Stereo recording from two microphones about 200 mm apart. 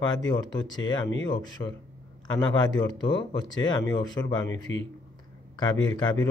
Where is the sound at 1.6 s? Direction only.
25° left (ahead or behind).